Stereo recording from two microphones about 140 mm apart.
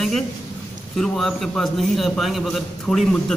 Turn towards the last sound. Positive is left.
turn(degrees=5)  # may be behind; listen again after turning